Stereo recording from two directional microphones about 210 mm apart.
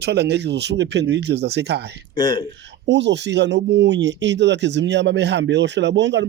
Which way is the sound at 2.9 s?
55° right (ahead or behind).